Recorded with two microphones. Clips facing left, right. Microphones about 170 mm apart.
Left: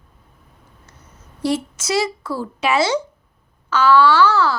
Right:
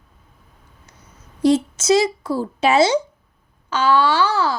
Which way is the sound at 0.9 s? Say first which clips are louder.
Left 1 dB; 15° right (ahead or behind).